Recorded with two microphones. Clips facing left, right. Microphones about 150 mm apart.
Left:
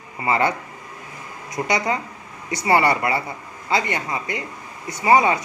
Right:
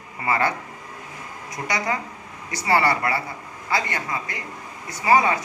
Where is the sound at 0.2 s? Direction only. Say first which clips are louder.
Left 3 dB; 20° left (ahead or behind).